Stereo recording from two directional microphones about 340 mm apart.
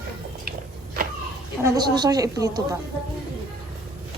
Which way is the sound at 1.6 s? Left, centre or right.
Centre.